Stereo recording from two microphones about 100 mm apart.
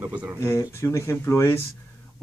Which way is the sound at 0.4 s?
30° left (ahead or behind).